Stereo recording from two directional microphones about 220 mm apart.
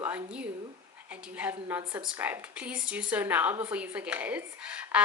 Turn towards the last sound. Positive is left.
turn(degrees=-5)  # may be behind; listen again after turning